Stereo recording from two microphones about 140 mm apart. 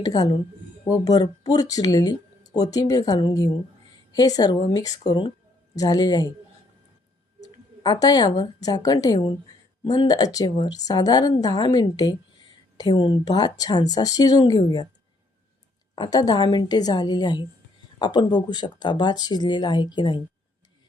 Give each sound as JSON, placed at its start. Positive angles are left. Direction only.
{"t": 0.0, "sound": "a woman's voice", "side_deg": 25}
{"t": 7.8, "sound": "a woman's voice", "side_deg": 30}
{"t": 16.0, "sound": "speech", "side_deg": 30}